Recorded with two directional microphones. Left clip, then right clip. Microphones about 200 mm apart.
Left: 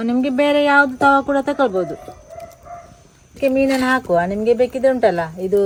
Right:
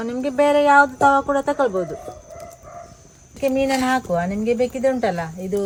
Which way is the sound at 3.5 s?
30° left (ahead or behind).